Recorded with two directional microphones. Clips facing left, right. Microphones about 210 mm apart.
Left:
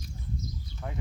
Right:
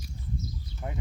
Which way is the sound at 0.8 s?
15° right (ahead or behind).